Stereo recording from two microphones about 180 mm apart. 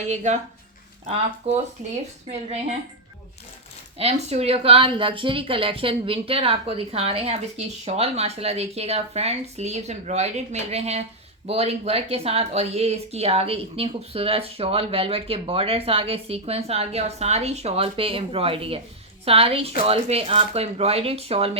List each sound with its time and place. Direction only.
0.1 s speech: 40° right (ahead or behind)
3.9 s speech: 35° right (ahead or behind)